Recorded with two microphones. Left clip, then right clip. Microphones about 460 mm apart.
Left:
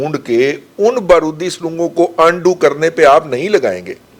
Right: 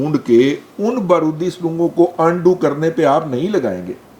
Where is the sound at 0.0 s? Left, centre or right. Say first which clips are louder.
Even; left.